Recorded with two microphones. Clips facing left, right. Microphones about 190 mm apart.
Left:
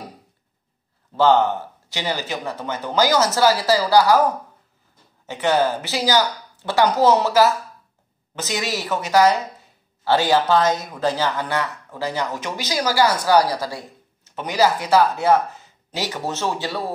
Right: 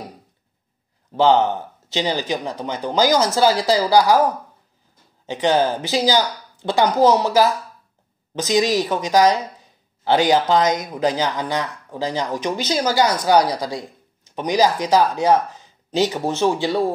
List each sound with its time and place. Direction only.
1.1 s a woman's voice: 15° right (ahead or behind)